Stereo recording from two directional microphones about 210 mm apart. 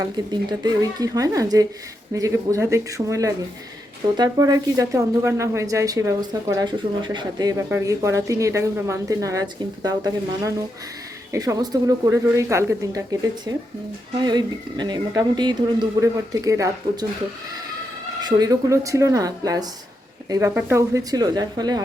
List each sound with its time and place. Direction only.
0.0 s speech: 20° right (ahead or behind)
18.2 s speech: 20° right (ahead or behind)